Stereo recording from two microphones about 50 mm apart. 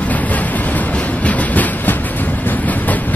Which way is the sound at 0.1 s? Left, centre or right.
Left.